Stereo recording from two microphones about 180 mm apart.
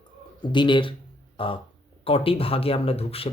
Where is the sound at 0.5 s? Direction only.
25° left (ahead or behind).